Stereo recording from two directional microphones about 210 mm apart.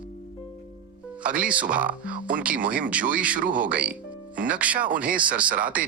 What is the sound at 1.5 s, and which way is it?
Speech, 5° right (ahead or behind).